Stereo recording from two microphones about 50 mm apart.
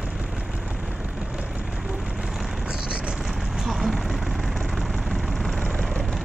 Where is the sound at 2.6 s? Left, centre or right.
Centre.